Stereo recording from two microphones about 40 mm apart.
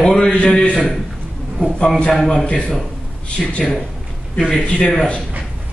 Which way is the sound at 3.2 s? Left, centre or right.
Left.